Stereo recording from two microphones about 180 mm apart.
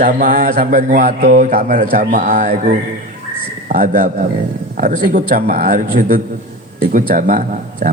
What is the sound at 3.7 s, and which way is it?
A man's voice, 50° right (ahead or behind).